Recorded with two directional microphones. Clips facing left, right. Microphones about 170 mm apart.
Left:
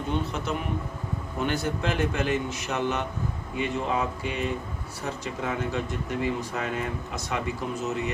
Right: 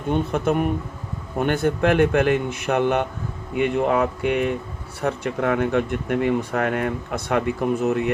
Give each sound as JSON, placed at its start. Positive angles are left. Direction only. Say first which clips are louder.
{"t": 0.1, "sound": "speech", "louder": "right 9 dB", "side_deg": -55}